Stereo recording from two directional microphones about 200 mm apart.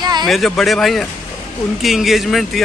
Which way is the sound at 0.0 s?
20° right (ahead or behind).